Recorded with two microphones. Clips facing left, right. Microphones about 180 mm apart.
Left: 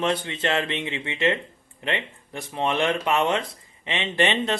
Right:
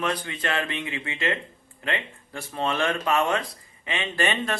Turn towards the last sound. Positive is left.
turn(degrees=20)  # may be behind; listen again after turning